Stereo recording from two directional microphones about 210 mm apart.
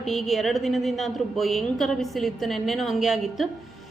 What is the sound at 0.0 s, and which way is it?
A woman's voice, centre (ahead or behind).